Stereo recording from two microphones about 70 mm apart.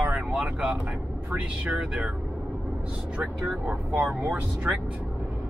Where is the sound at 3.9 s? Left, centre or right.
Right.